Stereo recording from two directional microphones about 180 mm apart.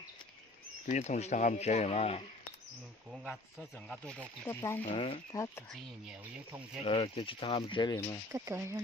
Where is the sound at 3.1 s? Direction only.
Centre (ahead or behind).